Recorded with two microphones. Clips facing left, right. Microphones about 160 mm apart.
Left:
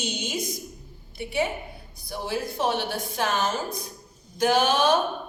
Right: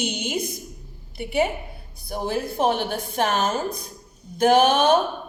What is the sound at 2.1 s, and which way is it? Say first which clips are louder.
A woman's voice: right 4 dB; 50° right (ahead or behind).